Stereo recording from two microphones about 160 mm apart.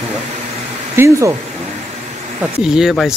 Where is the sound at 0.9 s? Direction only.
20° right (ahead or behind).